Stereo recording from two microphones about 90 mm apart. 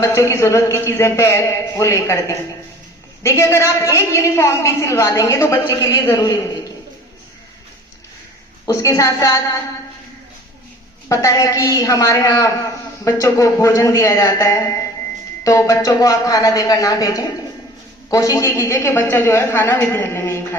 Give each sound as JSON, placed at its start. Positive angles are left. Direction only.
{"t": 0.0, "sound": "a woman's voice", "side_deg": 35}
{"t": 8.6, "sound": "a woman's voice", "side_deg": 35}
{"t": 11.1, "sound": "a woman's voice", "side_deg": 35}